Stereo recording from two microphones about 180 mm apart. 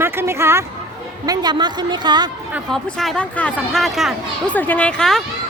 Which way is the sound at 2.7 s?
Centre (ahead or behind).